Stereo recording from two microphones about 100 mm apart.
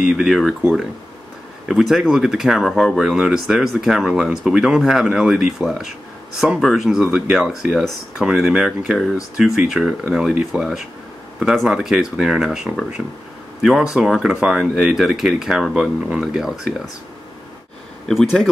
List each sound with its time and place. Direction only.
0.0 s speech: 5° right (ahead or behind)
1.7 s speech: 5° right (ahead or behind)
18.0 s speech: centre (ahead or behind)